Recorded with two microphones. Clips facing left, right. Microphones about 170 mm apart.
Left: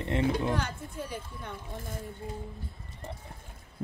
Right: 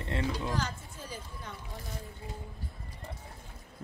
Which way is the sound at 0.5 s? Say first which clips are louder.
Left 3 dB; 60° left (ahead or behind).